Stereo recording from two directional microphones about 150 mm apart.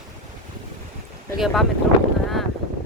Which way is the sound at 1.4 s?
Centre (ahead or behind).